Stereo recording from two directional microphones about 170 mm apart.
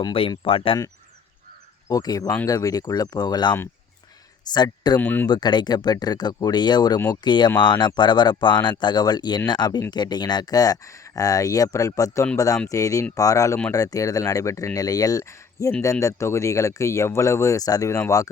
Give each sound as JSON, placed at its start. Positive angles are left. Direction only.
{"t": 0.0, "sound": "speech", "side_deg": 30}
{"t": 1.9, "sound": "speech", "side_deg": 20}
{"t": 4.5, "sound": "speech", "side_deg": 25}
{"t": 4.9, "sound": "speech", "side_deg": 10}
{"t": 5.3, "sound": "speech", "side_deg": 25}